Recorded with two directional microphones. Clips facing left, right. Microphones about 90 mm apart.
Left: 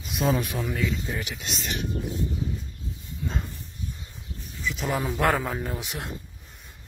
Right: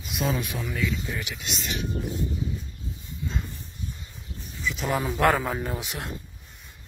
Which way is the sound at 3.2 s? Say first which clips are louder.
Left 1 dB; 50° left (ahead or behind).